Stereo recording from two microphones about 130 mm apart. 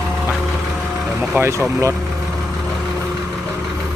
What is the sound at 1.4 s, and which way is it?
Speech, 20° right (ahead or behind).